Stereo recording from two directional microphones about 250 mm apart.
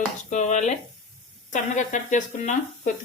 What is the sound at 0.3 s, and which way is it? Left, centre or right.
Speech, left.